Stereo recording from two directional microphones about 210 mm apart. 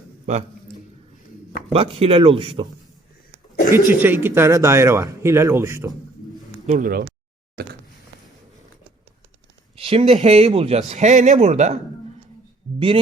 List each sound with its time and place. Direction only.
1.7 s speech: 25° right (ahead or behind)
3.7 s speech: 10° right (ahead or behind)
6.7 s a man's voice: 40° right (ahead or behind)
7.5 s a sound: 50° right (ahead or behind)
9.7 s a sound: 25° right (ahead or behind)
10.2 s a man's voice: 30° right (ahead or behind)